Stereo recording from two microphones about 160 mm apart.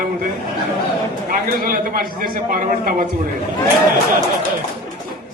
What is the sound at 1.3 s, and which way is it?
A man's voice, 65° right (ahead or behind).